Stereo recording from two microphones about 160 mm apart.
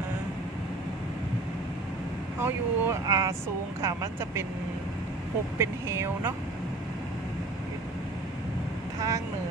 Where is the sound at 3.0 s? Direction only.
20° right (ahead or behind).